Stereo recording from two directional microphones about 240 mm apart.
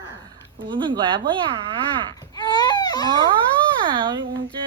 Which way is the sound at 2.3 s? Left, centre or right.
Centre.